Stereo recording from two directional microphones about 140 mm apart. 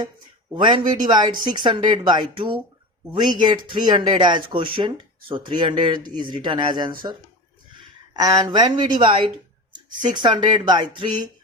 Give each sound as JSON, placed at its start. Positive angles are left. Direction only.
{"t": 0.5, "sound": "speech", "side_deg": -35}